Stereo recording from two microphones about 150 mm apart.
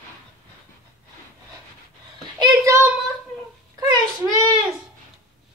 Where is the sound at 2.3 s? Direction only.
25° right (ahead or behind).